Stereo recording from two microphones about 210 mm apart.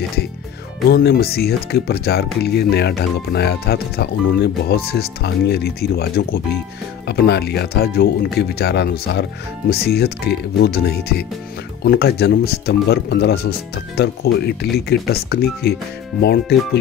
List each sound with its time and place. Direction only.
0.8 s speech: 50° left (ahead or behind)